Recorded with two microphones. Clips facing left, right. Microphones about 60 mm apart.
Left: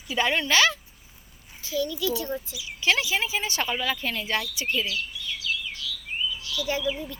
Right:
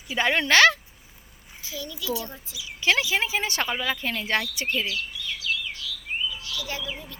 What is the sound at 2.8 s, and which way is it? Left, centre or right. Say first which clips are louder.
Speech: right 1 dB; right.